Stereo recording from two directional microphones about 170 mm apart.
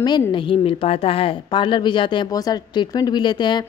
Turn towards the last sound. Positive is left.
turn(degrees=25)  # may be behind; listen again after turning